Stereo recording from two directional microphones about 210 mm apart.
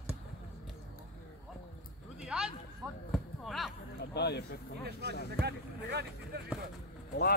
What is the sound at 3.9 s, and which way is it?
Speech, 50° left (ahead or behind).